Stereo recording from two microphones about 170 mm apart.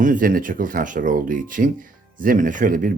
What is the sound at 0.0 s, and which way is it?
Speech, 50° right (ahead or behind).